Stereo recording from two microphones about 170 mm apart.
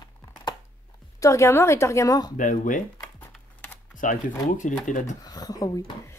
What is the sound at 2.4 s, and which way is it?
Speech, 50° left (ahead or behind).